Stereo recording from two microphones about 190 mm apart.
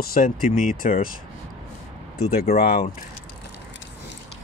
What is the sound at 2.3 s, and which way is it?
Speech, 55° left (ahead or behind).